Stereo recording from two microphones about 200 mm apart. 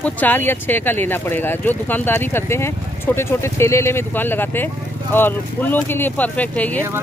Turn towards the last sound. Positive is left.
turn(degrees=5)  # may be behind; listen again after turning